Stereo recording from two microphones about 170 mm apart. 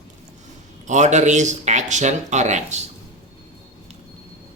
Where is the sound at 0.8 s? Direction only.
45° right (ahead or behind).